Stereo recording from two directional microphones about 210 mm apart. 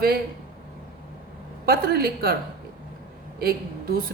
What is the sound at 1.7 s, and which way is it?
Speech, 45° right (ahead or behind).